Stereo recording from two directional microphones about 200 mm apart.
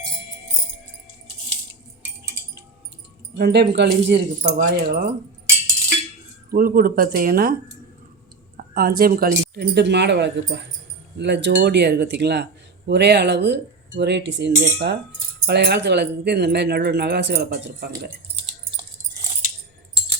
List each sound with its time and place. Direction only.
3.3 s speech: 55° right (ahead or behind)
6.5 s speech: 50° right (ahead or behind)
8.5 s speech: 50° right (ahead or behind)